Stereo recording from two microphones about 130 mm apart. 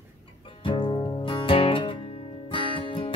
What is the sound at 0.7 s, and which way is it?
Music, 40° left (ahead or behind).